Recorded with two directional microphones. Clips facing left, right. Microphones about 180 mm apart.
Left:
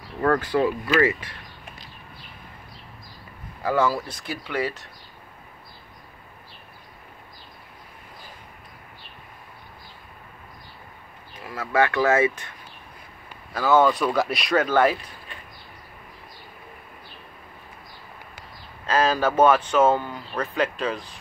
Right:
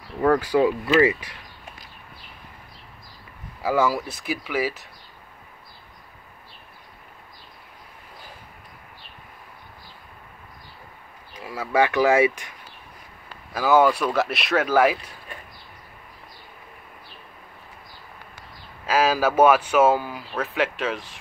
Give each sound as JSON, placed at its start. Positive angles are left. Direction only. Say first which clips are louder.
{"t": 0.2, "sound": "speech", "louder": "right 2 dB", "side_deg": -10}
{"t": 3.6, "sound": "speech", "louder": "right 1 dB", "side_deg": -5}
{"t": 11.5, "sound": "speech", "louder": "right 1 dB", "side_deg": -15}
{"t": 18.9, "sound": "speech", "louder": "right 1 dB", "side_deg": -10}